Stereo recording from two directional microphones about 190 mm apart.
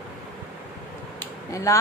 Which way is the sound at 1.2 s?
15° left (ahead or behind).